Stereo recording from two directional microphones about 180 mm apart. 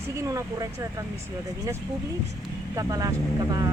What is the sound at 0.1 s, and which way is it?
Speech, 15° right (ahead or behind).